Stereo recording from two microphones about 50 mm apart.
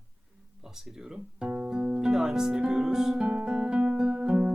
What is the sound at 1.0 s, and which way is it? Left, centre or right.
Speech, centre.